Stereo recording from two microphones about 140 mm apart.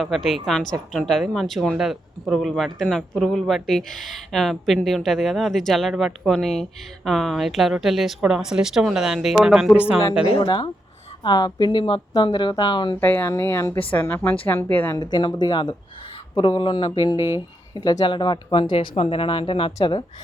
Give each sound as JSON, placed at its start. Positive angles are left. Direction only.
{"t": 0.0, "sound": "speech", "side_deg": 0}
{"t": 10.3, "sound": "speech", "side_deg": 35}
{"t": 13.0, "sound": "speech", "side_deg": 15}
{"t": 14.9, "sound": "speech", "side_deg": 30}